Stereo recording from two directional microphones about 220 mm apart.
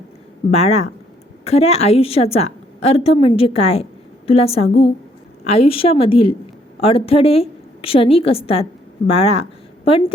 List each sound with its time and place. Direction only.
0.5 s a woman's voice: 30° left (ahead or behind)